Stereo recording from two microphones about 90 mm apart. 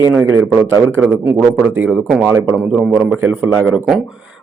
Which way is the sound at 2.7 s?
10° right (ahead or behind).